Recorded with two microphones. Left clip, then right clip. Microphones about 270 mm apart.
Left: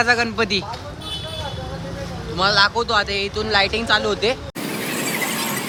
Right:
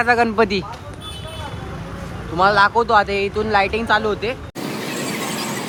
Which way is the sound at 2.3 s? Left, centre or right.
Centre.